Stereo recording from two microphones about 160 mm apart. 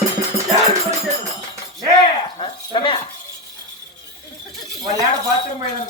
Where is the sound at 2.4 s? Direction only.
30° left (ahead or behind).